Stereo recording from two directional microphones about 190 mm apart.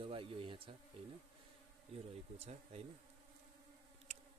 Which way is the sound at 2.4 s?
35° right (ahead or behind).